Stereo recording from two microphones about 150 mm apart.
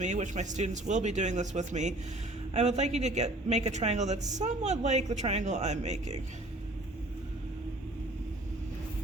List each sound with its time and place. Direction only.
0.0 s a man's voice: 50° right (ahead or behind)